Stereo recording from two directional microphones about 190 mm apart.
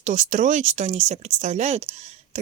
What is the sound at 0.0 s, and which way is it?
Speech, 40° right (ahead or behind).